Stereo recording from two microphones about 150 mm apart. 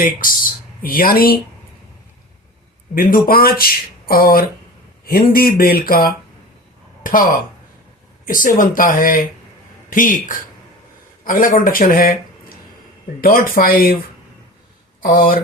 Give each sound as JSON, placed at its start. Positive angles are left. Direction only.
{"t": 0.0, "sound": "speech", "side_deg": 65}
{"t": 2.9, "sound": "speech", "side_deg": 70}
{"t": 3.2, "sound": "speech", "side_deg": 80}
{"t": 13.2, "sound": "speech", "side_deg": 70}
{"t": 15.0, "sound": "speech", "side_deg": 70}